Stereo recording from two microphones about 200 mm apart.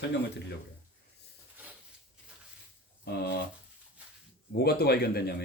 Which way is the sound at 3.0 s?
55° left (ahead or behind).